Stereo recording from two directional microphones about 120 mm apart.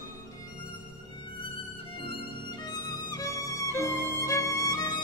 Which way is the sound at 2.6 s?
30° left (ahead or behind).